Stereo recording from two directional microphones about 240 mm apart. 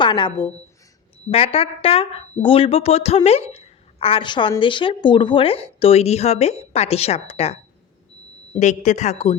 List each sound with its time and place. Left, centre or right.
0.0 s a woman's voice: centre
1.5 s a woman's voice: left
8.5 s a woman's voice: left